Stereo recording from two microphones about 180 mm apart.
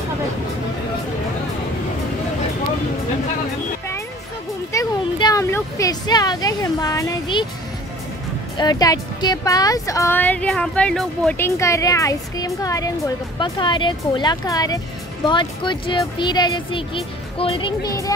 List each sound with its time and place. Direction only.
4.7 s speech: 20° left (ahead or behind)
8.5 s speech: 20° left (ahead or behind)